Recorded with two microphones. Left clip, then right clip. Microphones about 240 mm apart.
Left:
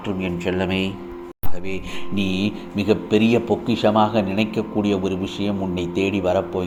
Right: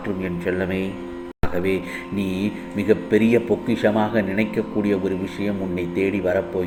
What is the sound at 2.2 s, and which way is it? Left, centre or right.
Speech, centre.